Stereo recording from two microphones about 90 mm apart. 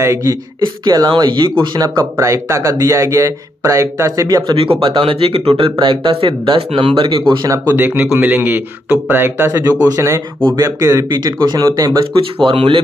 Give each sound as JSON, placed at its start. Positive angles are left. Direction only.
{"t": 0.0, "sound": "speech", "side_deg": -35}
{"t": 0.6, "sound": "speech", "side_deg": -50}
{"t": 4.6, "sound": "speech", "side_deg": -80}
{"t": 7.4, "sound": "speech", "side_deg": -40}
{"t": 7.7, "sound": "speech", "side_deg": -20}
{"t": 12.4, "sound": "speech", "side_deg": -80}